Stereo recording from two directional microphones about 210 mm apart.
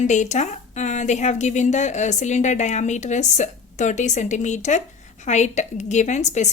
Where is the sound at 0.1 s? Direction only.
35° left (ahead or behind).